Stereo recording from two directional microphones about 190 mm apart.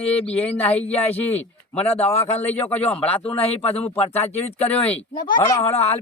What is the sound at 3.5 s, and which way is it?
Speech, 30° left (ahead or behind).